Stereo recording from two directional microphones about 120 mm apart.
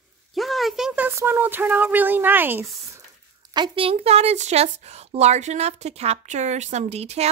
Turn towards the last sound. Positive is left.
turn(degrees=-60)  # may be behind; listen again after turning